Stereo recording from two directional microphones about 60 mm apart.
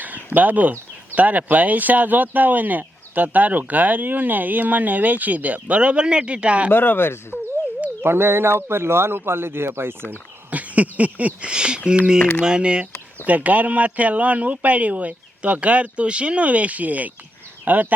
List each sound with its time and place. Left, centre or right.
0.0 s speech: right
6.7 s speech: left
8.0 s speech: right
10.5 s speech: right